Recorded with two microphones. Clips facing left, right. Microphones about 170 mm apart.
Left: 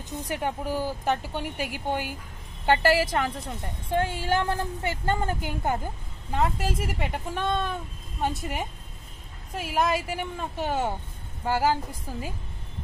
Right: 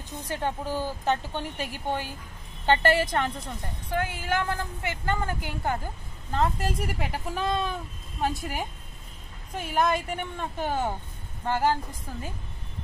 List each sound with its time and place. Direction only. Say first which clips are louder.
0.3 s speech: even; 15° left (ahead or behind)
3.9 s a woman's voice: left 3 dB; 30° left (ahead or behind)
6.3 s speech: even; 5° left (ahead or behind)